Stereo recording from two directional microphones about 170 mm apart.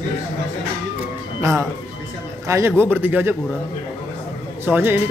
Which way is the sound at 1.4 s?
15° right (ahead or behind).